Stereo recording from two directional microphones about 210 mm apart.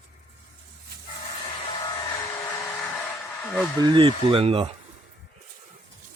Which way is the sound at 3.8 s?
25° right (ahead or behind).